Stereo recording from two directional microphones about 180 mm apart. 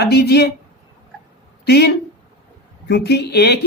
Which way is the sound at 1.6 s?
65° left (ahead or behind).